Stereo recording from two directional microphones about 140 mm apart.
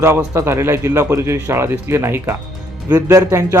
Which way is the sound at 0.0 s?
20° right (ahead or behind).